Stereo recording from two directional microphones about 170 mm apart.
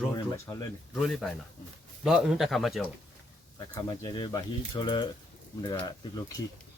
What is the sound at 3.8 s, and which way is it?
Speech, 30° left (ahead or behind).